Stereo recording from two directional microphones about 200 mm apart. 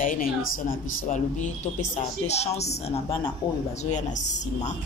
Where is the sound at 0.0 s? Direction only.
45° left (ahead or behind).